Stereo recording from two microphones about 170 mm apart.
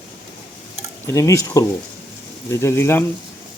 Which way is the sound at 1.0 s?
15° left (ahead or behind).